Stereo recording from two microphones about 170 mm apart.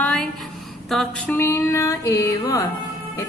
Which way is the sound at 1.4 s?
15° left (ahead or behind).